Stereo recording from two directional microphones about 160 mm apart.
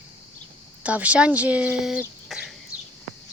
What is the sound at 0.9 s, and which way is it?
Speech, 10° right (ahead or behind).